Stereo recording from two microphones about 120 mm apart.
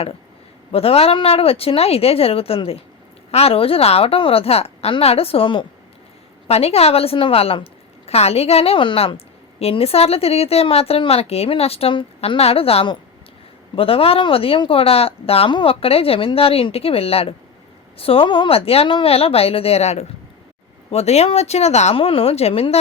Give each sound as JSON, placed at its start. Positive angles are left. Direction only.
{"t": 0.7, "sound": "speech", "side_deg": 55}
{"t": 6.5, "sound": "a woman's voice", "side_deg": 60}